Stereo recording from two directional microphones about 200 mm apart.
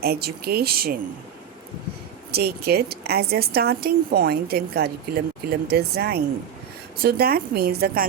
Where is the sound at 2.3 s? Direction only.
50° right (ahead or behind).